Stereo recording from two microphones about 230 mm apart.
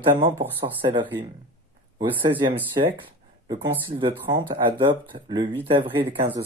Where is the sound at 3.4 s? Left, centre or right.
Centre.